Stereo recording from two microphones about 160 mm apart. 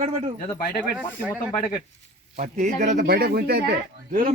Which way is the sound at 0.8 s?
5° right (ahead or behind).